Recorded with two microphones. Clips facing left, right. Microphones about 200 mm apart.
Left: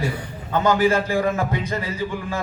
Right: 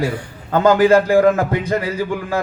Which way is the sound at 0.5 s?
55° right (ahead or behind).